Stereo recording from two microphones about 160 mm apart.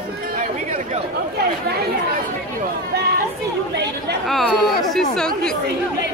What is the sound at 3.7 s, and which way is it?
Chatter, 90° right.